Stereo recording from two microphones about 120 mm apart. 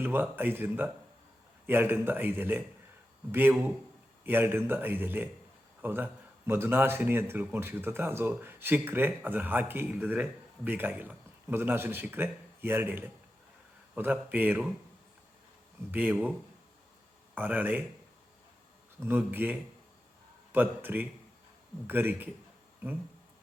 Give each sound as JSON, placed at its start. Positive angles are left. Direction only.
{"t": 0.0, "sound": "speech", "side_deg": -15}
{"t": 4.2, "sound": "a man's voice", "side_deg": -20}
{"t": 15.9, "sound": "speech", "side_deg": -15}
{"t": 17.3, "sound": "speech", "side_deg": -15}
{"t": 19.0, "sound": "speech", "side_deg": -15}